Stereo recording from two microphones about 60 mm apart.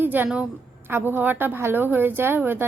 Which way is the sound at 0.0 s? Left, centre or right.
Right.